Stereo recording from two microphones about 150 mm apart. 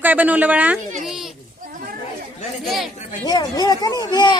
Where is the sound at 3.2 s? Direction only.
25° left (ahead or behind).